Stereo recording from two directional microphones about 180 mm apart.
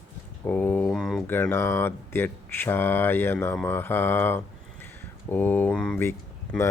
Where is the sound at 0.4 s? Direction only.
10° left (ahead or behind).